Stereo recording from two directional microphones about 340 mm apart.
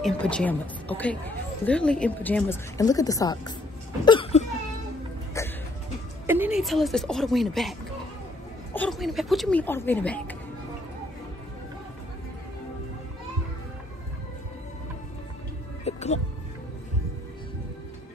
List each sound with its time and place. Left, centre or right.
0.0 s a woman's voice: centre
4.0 s a sound: centre
6.2 s speech: centre
8.7 s a woman's voice: centre
15.8 s music: centre